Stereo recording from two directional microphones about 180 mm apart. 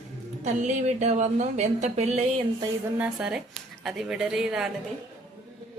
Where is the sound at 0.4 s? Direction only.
40° right (ahead or behind).